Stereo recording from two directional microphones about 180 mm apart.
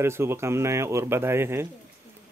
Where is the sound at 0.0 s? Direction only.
15° right (ahead or behind).